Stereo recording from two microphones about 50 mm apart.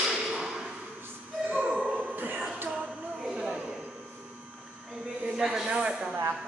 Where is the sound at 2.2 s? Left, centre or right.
Right.